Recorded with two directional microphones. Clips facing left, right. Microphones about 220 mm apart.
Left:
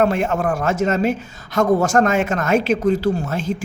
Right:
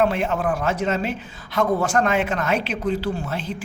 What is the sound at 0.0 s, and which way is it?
A woman's voice, 45° left (ahead or behind).